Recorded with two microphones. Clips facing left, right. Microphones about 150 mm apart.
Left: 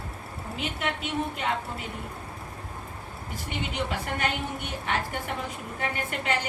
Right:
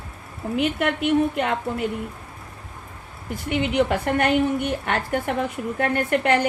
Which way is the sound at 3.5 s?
60° right (ahead or behind).